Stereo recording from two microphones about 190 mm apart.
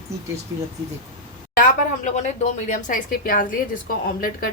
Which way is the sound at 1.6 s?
40° left (ahead or behind).